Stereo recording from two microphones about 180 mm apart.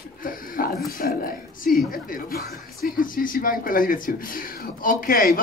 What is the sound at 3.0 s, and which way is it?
Speech, 50° left (ahead or behind).